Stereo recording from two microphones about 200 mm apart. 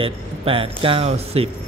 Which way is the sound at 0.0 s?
25° right (ahead or behind).